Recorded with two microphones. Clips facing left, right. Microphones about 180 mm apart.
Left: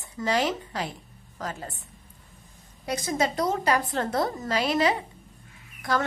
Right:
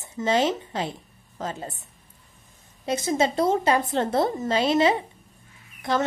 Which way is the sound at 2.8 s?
25° right (ahead or behind).